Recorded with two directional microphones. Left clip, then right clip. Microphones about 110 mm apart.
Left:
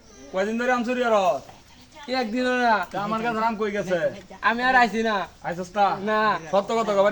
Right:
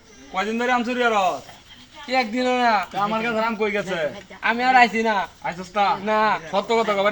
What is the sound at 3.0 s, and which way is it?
Speech, 40° left (ahead or behind).